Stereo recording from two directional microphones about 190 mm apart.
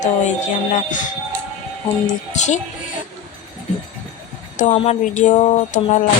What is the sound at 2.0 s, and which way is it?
Speech, 40° left (ahead or behind).